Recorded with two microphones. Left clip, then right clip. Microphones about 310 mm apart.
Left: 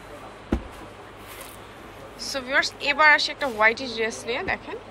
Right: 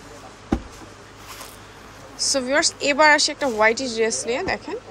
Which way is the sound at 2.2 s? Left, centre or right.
Centre.